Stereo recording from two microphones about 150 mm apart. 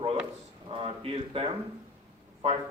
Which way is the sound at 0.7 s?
40° right (ahead or behind).